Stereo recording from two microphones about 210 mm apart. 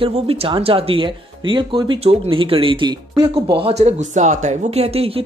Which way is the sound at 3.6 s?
30° right (ahead or behind).